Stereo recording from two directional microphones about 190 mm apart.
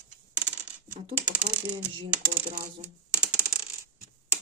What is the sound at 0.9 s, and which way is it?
Speech, 25° right (ahead or behind).